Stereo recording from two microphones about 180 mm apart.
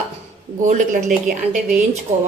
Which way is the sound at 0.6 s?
45° right (ahead or behind).